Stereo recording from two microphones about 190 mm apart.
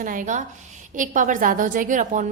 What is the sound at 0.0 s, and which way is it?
A woman's voice, 45° right (ahead or behind).